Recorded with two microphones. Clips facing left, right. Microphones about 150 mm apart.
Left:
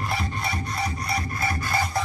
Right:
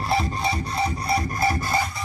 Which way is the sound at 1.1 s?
35° right (ahead or behind).